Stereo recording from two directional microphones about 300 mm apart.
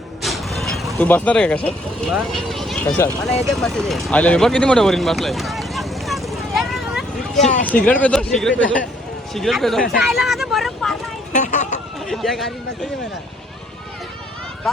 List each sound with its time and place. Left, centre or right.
0.2 s speech: centre
3.4 s vehicle: centre
7.9 s speech: centre
11.3 s vehicle: left
12.0 s speech: centre